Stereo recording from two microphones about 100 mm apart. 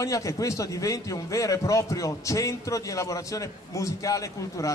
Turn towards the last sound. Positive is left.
turn(degrees=35)  # may be behind; listen again after turning